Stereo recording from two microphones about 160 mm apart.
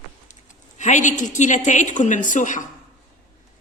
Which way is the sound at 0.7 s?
50° left (ahead or behind).